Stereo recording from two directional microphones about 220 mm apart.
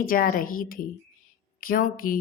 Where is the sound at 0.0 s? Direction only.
40° left (ahead or behind).